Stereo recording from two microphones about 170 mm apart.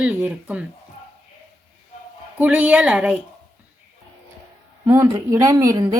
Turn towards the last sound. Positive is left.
turn(degrees=-20)  # may be behind; listen again after turning